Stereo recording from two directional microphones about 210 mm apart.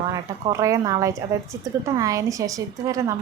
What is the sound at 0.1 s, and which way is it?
A woman's voice, 15° right (ahead or behind).